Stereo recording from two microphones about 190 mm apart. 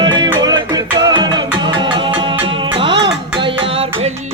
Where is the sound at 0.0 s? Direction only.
20° right (ahead or behind).